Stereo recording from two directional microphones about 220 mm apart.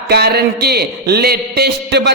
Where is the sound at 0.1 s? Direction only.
45° right (ahead or behind).